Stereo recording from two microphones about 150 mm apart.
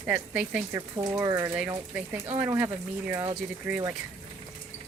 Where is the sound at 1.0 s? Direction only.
25° right (ahead or behind).